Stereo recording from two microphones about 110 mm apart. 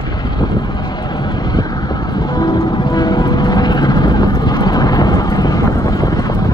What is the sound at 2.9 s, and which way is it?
Vehicle, 40° left (ahead or behind).